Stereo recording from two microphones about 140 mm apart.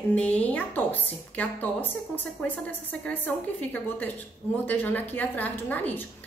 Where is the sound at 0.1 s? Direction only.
10° left (ahead or behind).